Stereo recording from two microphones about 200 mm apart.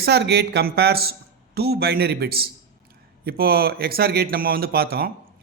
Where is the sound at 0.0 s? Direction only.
55° right (ahead or behind).